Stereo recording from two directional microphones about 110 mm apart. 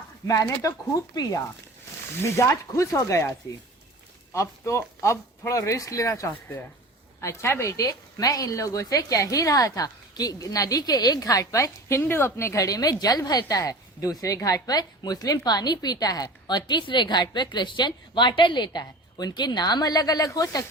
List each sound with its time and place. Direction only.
0.3 s a woman's voice: 30° left (ahead or behind)
4.4 s a woman's voice: 25° left (ahead or behind)